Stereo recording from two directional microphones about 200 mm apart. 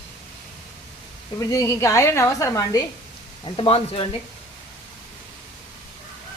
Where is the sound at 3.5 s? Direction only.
25° left (ahead or behind).